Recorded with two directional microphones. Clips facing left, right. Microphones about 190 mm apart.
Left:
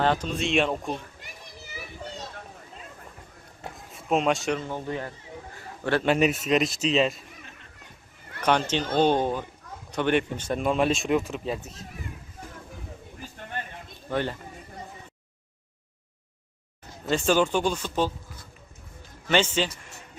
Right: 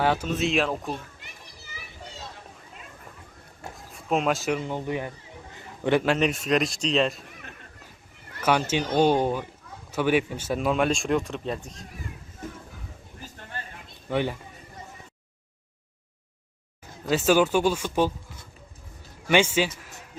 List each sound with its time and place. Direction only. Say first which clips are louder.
0.0 s speech: right 1 dB; 10° right (ahead or behind)
3.8 s speech: left 1 dB; centre (ahead or behind)
4.6 s speech: right 2 dB; 15° right (ahead or behind)
6.1 s speech: left 1 dB; 5° left (ahead or behind)
8.4 s speech: even; 5° right (ahead or behind)
14.1 s speech: right 2 dB; 10° right (ahead or behind)
17.1 s speech: right 2 dB; 5° right (ahead or behind)
19.3 s speech: right 2 dB; 10° right (ahead or behind)